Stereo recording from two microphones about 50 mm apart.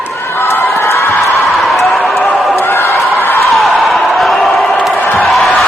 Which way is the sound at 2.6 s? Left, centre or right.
Left.